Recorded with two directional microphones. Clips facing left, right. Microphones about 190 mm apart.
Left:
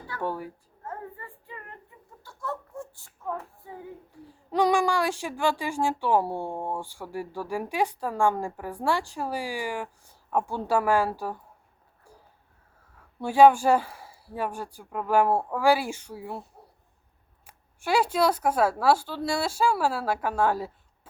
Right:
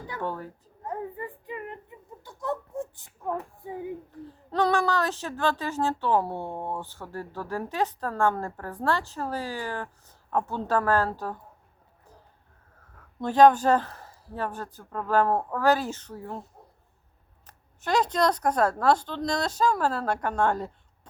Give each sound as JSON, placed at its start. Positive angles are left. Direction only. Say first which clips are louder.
{"t": 0.2, "sound": "speech", "louder": "left 2 dB", "side_deg": 10}
{"t": 0.9, "sound": "a sound", "louder": "right 5 dB", "side_deg": -15}
{"t": 4.1, "sound": "speech", "louder": "left 2 dB", "side_deg": 10}
{"t": 13.1, "sound": "speech", "louder": "left 1 dB", "side_deg": 10}
{"t": 17.4, "sound": "speech", "louder": "left 1 dB", "side_deg": 10}